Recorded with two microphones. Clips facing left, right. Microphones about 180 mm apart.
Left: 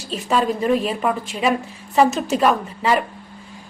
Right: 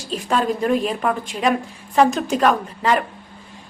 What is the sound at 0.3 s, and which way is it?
A woman's voice, centre (ahead or behind).